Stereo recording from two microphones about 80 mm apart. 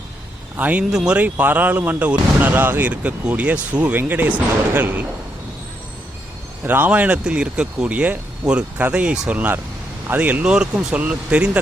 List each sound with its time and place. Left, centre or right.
0.5 s speech: centre
6.7 s speech: right